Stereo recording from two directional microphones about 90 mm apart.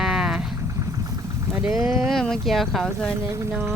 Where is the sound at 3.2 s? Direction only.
35° right (ahead or behind).